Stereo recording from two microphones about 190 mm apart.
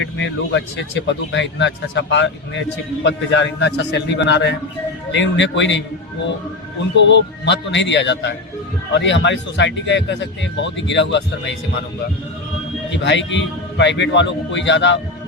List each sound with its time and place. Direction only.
0.0 s speech: 70° left (ahead or behind)
6.9 s speech: 70° left (ahead or behind)
13.0 s speech: 70° left (ahead or behind)